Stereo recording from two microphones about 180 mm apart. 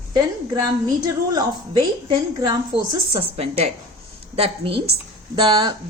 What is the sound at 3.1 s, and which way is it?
A woman's voice, 30° right (ahead or behind).